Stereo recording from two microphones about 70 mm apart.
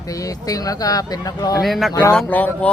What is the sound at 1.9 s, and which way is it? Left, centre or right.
Speech, left.